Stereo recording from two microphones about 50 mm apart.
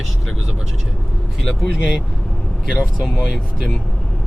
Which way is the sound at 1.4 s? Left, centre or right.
Centre.